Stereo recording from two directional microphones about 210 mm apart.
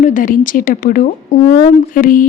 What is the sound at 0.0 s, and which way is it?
Speech, 40° left (ahead or behind).